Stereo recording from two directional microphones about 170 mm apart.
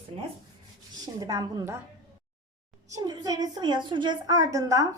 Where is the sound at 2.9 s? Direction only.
25° right (ahead or behind).